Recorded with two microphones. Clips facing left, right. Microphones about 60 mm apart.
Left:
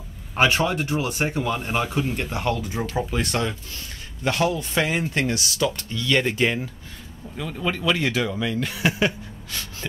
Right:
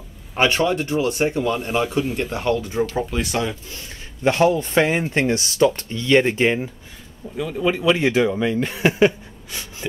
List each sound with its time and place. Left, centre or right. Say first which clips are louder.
0.4 s speech: right 2 dB; centre
3.7 s speech: right 1 dB; right
7.3 s speech: right 6 dB; centre